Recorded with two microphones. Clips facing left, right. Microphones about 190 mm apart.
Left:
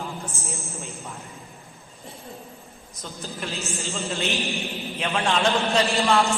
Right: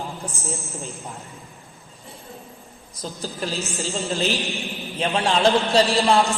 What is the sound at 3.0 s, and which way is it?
Speech, 35° right (ahead or behind).